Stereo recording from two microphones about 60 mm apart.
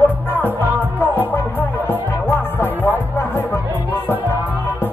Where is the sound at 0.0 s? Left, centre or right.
Left.